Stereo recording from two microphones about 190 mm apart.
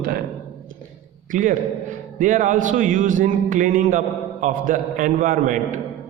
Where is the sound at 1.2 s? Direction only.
45° right (ahead or behind).